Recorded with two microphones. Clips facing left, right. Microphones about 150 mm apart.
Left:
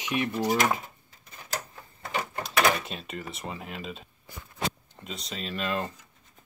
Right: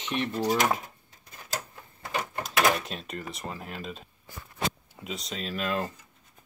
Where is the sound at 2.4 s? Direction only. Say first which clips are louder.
Even; centre (ahead or behind).